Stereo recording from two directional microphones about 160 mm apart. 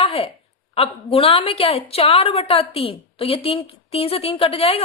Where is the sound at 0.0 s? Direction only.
35° left (ahead or behind).